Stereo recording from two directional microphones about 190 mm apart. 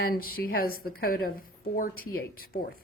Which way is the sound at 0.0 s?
50° left (ahead or behind).